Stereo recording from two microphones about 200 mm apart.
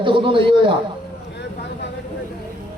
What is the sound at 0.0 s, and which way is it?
Speech, 25° right (ahead or behind).